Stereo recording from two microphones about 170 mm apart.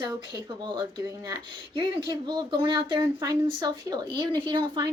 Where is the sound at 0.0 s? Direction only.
25° right (ahead or behind).